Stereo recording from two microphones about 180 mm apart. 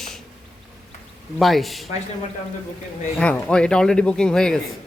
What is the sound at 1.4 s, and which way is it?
Speech, centre (ahead or behind).